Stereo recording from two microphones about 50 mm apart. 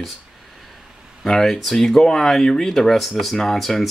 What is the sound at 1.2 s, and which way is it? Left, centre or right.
Speech, centre.